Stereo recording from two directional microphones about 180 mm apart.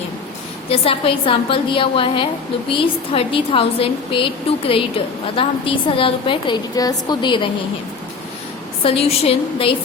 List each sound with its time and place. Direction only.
0.7 s a woman's voice: 30° left (ahead or behind)
8.8 s a woman's voice: 30° left (ahead or behind)